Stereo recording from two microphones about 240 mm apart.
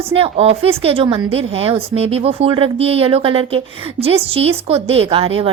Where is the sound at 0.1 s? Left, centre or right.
Right.